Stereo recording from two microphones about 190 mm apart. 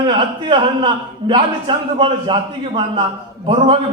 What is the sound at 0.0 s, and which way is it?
A man's voice, 25° right (ahead or behind).